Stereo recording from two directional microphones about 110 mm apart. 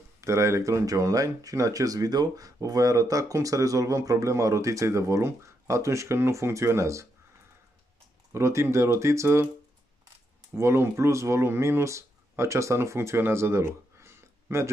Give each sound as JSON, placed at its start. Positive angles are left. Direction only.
{"t": 0.2, "sound": "speech", "side_deg": -25}
{"t": 8.3, "sound": "speech", "side_deg": -25}
{"t": 10.5, "sound": "speech", "side_deg": -25}